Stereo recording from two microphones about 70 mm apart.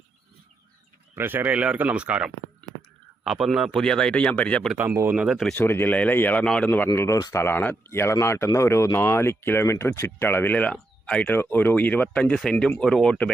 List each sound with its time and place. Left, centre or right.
1.1 s speech: right
1.5 s speech: centre
3.2 s speech: centre
3.8 s speech: centre
5.1 s speech: centre
5.6 s speech: left
6.4 s speech: centre
6.7 s speech: left
7.2 s speech: left
7.4 s speech: left; by 13.1 s centre